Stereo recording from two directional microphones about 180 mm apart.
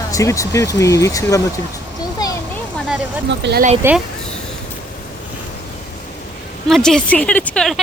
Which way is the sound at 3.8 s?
15° right (ahead or behind).